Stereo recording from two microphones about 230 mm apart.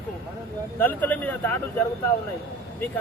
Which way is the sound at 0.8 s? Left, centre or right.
Centre.